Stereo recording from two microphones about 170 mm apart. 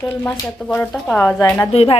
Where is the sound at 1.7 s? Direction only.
35° left (ahead or behind).